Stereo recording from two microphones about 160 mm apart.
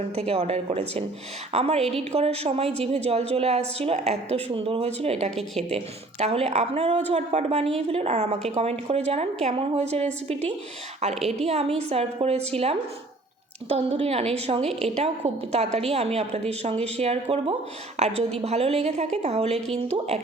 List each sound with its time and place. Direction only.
0.2 s a woman's voice: 40° right (ahead or behind)
5.3 s a woman's voice: centre (ahead or behind)
5.7 s a woman's voice: 40° right (ahead or behind)